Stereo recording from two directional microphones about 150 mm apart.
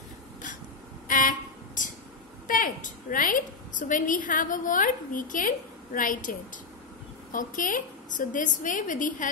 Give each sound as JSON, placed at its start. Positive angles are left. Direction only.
{"t": 1.0, "sound": "a sound", "side_deg": 65}
{"t": 2.4, "sound": "a woman's voice", "side_deg": 65}
{"t": 7.3, "sound": "a woman's voice", "side_deg": 60}